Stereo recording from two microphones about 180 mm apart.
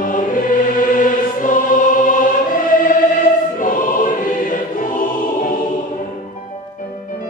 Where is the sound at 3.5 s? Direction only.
50° left (ahead or behind).